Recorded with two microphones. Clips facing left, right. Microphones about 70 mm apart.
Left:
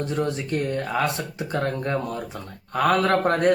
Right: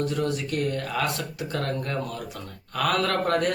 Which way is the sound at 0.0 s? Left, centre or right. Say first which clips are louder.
Left 1 dB; left.